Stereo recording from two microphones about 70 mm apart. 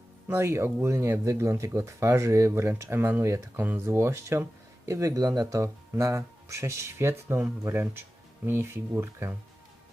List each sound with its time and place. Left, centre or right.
0.3 s speech: right